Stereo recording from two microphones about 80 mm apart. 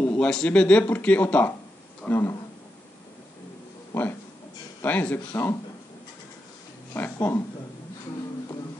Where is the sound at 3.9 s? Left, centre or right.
Left.